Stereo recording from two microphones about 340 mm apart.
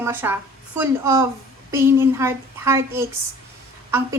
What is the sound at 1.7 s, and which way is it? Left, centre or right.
A woman's voice, centre.